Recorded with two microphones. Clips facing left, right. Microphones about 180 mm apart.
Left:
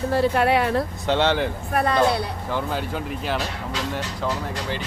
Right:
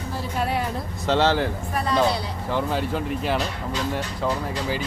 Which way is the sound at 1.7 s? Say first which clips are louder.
Left 5 dB; 55° left (ahead or behind).